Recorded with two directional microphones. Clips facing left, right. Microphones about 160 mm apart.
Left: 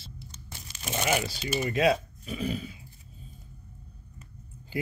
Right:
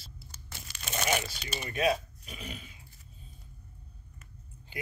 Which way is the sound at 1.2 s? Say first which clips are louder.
Left 9 dB; 25° left (ahead or behind).